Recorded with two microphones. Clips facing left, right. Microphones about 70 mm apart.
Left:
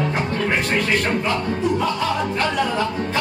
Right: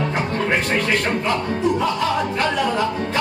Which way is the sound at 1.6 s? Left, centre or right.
Centre.